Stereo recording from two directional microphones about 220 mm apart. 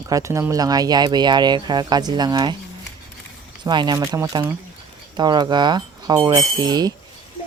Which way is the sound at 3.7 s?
20° right (ahead or behind).